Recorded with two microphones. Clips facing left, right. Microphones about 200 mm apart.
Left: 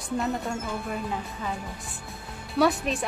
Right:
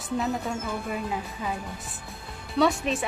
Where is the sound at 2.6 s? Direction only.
Centre (ahead or behind).